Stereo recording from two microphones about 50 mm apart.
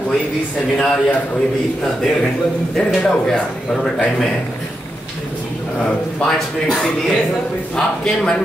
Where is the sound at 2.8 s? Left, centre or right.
Centre.